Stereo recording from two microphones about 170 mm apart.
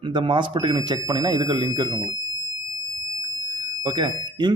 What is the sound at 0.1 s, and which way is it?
Speech, 30° right (ahead or behind).